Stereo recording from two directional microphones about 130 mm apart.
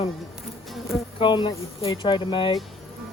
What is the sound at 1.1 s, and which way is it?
Speech, 40° left (ahead or behind).